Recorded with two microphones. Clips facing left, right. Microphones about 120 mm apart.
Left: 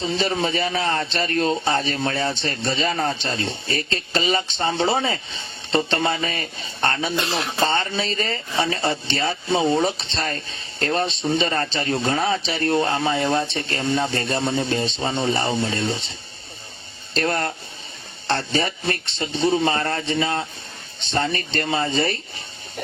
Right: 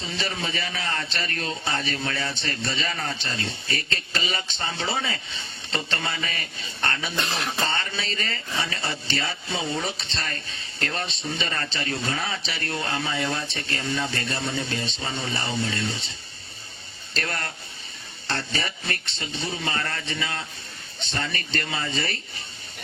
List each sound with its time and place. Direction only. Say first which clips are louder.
0.0 s speech: left 8 dB; 30° left (ahead or behind)
7.3 s speech: left 4 dB; 5° left (ahead or behind)
7.7 s speech: left 7 dB; 30° left (ahead or behind)
17.2 s a man's voice: left 8 dB; 30° left (ahead or behind)